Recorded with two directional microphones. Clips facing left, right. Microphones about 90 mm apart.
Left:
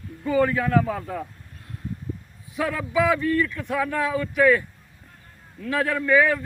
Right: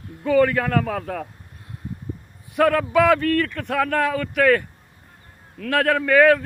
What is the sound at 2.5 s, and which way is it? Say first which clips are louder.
A man's voice: right 6 dB; 65° right (ahead or behind).